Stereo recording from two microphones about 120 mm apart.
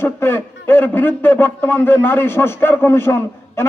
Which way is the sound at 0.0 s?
20° left (ahead or behind).